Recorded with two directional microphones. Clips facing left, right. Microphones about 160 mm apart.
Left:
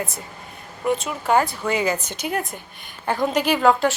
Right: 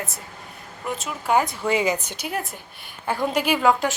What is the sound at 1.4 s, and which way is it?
A woman's voice, 25° right (ahead or behind).